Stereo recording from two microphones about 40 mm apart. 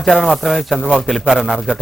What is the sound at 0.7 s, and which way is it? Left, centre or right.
Speech, centre.